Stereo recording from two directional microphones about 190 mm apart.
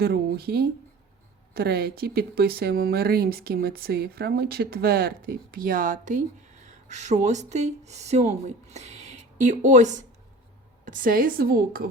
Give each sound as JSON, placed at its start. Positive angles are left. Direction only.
{"t": 0.0, "sound": "speech", "side_deg": -55}